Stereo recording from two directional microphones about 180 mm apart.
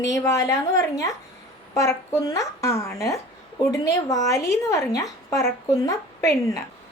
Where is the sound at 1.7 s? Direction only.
15° left (ahead or behind).